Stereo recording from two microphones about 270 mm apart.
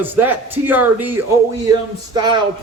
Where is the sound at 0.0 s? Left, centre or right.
Centre.